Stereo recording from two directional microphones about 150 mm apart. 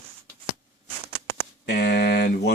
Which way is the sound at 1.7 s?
90° left.